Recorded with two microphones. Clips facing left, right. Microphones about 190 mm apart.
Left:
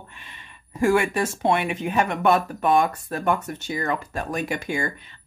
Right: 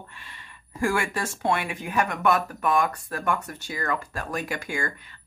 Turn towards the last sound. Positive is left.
turn(degrees=20)  # may be behind; listen again after turning